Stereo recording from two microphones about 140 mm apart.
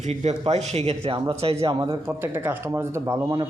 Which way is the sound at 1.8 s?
25° right (ahead or behind).